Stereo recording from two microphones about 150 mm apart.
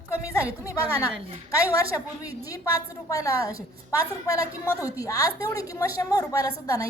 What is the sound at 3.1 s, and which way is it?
A woman's voice, 20° left (ahead or behind).